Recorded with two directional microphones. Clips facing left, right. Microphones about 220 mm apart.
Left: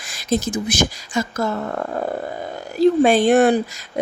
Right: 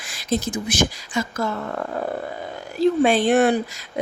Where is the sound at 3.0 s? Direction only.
45° left (ahead or behind).